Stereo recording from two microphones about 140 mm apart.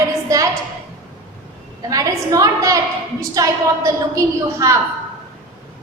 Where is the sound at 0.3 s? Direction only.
25° right (ahead or behind).